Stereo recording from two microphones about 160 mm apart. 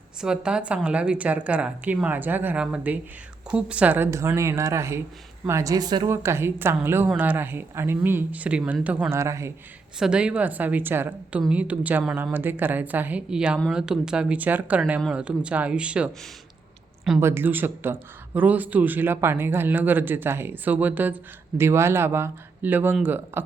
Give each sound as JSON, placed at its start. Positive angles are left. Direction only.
{"t": 0.2, "sound": "a woman's voice", "side_deg": -5}
{"t": 10.0, "sound": "a woman's voice", "side_deg": -5}
{"t": 17.2, "sound": "a woman's voice", "side_deg": -15}